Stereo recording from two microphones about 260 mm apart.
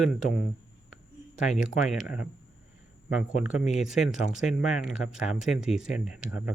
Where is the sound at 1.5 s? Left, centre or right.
Left.